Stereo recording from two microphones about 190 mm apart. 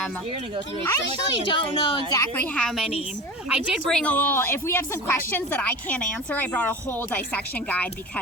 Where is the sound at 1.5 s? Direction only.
25° left (ahead or behind).